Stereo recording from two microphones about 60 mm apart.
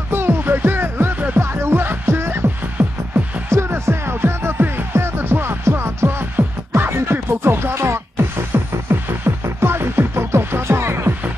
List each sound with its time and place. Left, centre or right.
0.1 s music: right
1.4 s music: right